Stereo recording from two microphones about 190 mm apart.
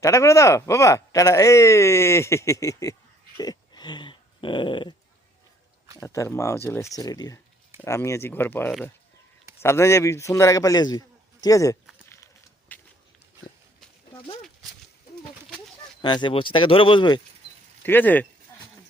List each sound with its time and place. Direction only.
0.0 s speech: 15° left (ahead or behind)
3.3 s dog: 20° left (ahead or behind)
6.0 s speech: 15° left (ahead or behind)
12.0 s a sound: 15° left (ahead or behind)
16.0 s speech: 25° left (ahead or behind)
17.8 s speech: 10° left (ahead or behind)